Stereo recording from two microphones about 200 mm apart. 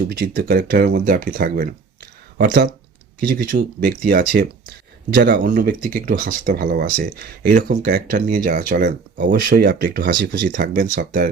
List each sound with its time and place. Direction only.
0.1 s speech: 50° right (ahead or behind)